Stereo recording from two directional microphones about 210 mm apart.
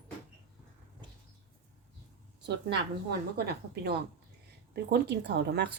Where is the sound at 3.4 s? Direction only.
50° right (ahead or behind).